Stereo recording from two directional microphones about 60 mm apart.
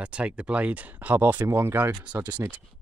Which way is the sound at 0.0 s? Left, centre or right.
Right.